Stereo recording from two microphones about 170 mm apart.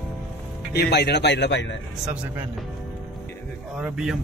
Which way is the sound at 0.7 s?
75° left (ahead or behind).